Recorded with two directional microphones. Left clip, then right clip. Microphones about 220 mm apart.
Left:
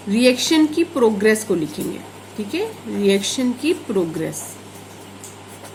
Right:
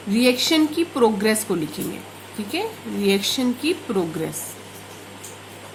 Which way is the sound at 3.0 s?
30° right (ahead or behind).